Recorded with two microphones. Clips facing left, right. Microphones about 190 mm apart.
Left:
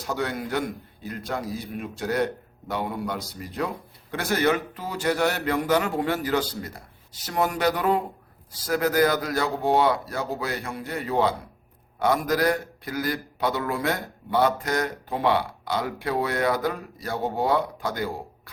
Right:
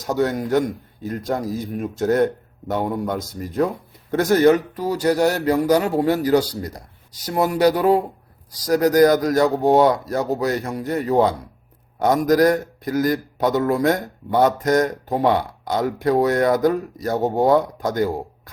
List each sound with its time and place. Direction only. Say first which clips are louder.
0.0 s a man's voice: right 7 dB; 45° right (ahead or behind)